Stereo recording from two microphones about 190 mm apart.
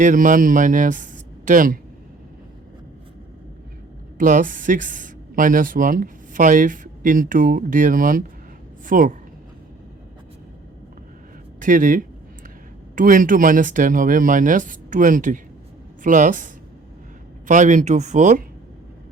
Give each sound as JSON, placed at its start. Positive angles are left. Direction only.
{"t": 0.0, "sound": "speech", "side_deg": -45}
{"t": 4.2, "sound": "a woman's voice", "side_deg": -45}
{"t": 11.6, "sound": "a woman's voice", "side_deg": -45}
{"t": 17.5, "sound": "speech", "side_deg": -40}